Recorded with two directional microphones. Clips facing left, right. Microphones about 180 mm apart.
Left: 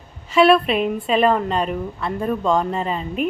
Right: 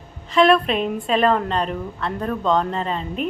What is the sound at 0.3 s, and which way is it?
A woman's voice, 5° left (ahead or behind).